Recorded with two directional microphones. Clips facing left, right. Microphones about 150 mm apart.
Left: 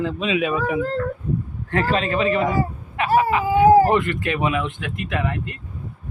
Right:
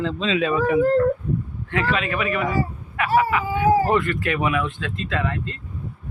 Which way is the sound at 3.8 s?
20° left (ahead or behind).